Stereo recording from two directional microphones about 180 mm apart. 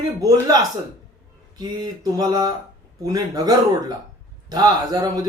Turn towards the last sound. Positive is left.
turn(degrees=-20)  # may be behind; listen again after turning